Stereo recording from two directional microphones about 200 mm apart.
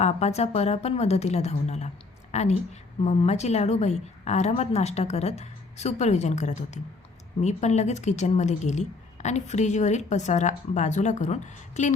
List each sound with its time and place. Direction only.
0.0 s speech: 30° left (ahead or behind)